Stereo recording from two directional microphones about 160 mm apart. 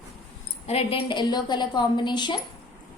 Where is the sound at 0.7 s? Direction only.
40° left (ahead or behind).